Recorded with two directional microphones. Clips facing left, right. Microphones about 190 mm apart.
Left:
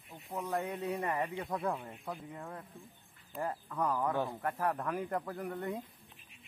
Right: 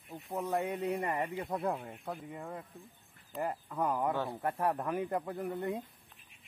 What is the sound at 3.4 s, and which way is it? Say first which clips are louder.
Speech: right 1 dB; 20° right (ahead or behind).